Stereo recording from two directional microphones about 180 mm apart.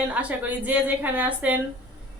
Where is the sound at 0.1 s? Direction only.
10° right (ahead or behind).